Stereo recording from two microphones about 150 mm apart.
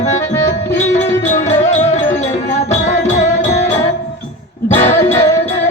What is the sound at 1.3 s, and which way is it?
Music, 50° left (ahead or behind).